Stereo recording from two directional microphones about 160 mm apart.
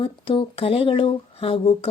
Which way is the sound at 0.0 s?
35° left (ahead or behind).